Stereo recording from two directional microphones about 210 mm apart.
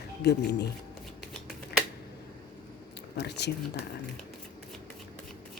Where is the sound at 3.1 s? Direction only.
55° left (ahead or behind).